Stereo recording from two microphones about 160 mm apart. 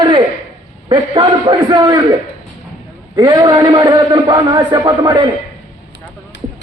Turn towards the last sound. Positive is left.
turn(degrees=-25)  # may be behind; listen again after turning